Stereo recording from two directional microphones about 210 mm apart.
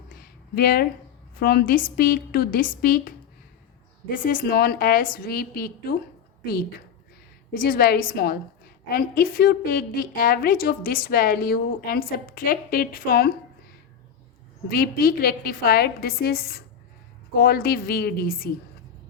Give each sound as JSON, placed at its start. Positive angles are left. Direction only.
{"t": 0.1, "sound": "a sound", "side_deg": 45}
{"t": 1.4, "sound": "a woman's voice", "side_deg": 45}
{"t": 4.1, "sound": "a woman's voice", "side_deg": 40}
{"t": 14.7, "sound": "a woman's voice", "side_deg": 45}